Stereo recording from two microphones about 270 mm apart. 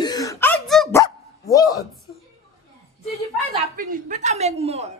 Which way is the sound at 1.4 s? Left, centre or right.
Centre.